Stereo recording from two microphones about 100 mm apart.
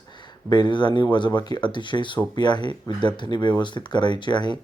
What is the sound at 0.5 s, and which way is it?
Speech, 50° left (ahead or behind).